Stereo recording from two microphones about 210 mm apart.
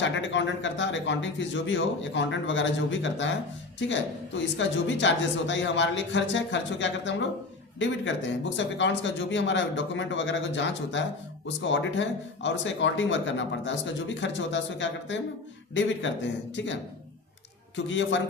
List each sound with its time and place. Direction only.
0.0 s speech: 60° left (ahead or behind)
17.7 s speech: 60° left (ahead or behind)